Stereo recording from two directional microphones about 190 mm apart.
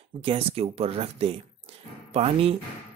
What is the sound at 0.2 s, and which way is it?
Speech, 30° right (ahead or behind).